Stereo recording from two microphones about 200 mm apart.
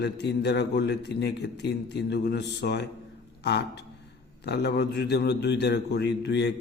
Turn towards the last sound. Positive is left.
turn(degrees=60)  # may be behind; listen again after turning